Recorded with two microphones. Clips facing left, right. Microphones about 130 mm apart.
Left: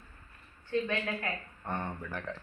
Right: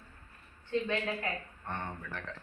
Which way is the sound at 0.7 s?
20° right (ahead or behind).